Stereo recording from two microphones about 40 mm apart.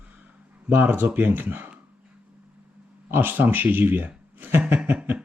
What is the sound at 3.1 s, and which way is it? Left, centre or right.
A man's voice, right.